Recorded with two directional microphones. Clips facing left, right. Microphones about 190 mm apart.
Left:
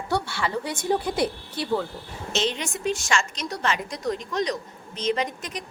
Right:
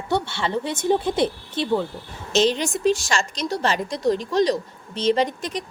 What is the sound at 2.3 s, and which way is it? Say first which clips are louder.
A woman's voice: right 7 dB; 35° right (ahead or behind).